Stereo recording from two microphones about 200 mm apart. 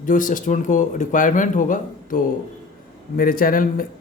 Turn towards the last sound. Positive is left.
turn(degrees=45)  # may be behind; listen again after turning